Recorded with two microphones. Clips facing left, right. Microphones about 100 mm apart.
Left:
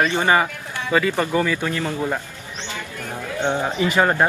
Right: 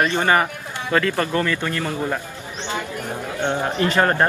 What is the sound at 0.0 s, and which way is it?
Speech, 15° left (ahead or behind).